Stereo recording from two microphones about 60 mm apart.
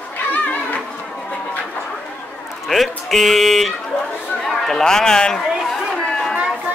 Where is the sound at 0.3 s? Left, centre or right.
Left.